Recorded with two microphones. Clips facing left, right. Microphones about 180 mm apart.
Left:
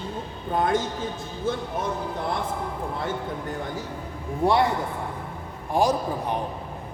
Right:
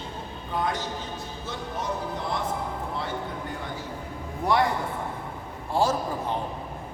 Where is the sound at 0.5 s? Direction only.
50° left (ahead or behind).